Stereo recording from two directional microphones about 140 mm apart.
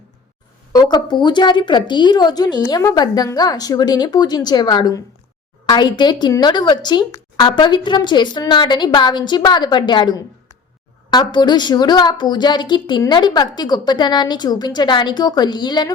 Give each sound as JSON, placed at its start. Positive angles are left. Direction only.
{"t": 0.7, "sound": "a woman's voice", "side_deg": 30}